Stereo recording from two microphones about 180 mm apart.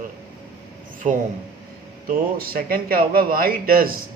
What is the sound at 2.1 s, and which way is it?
Speech, 55° right (ahead or behind).